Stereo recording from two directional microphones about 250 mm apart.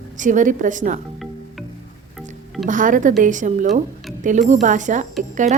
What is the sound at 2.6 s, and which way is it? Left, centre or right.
A woman's voice, right.